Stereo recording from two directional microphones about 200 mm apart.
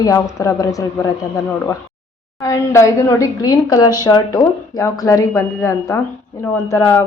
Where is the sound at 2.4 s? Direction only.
15° left (ahead or behind).